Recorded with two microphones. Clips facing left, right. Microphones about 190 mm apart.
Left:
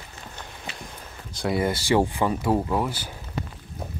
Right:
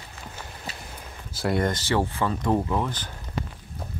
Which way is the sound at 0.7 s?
40° right (ahead or behind).